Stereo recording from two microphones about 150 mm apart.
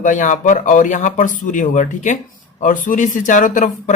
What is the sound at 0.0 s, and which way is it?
Speech, 60° left (ahead or behind).